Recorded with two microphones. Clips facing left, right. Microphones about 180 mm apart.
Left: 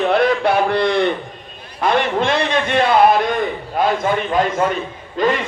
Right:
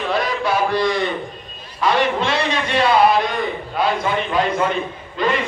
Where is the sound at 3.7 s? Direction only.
45° left (ahead or behind).